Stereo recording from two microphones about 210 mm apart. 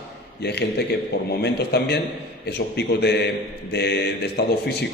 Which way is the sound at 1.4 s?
50° left (ahead or behind).